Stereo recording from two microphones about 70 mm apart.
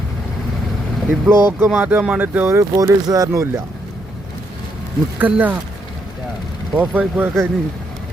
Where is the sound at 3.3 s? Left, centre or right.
Right.